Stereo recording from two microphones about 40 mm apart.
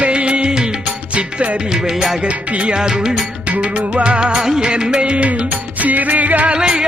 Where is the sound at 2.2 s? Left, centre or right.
Right.